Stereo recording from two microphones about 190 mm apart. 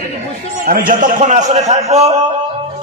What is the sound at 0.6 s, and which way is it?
A man's voice, 50° right (ahead or behind).